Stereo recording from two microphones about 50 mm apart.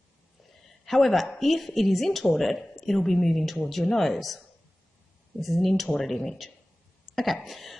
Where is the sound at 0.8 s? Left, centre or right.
Centre.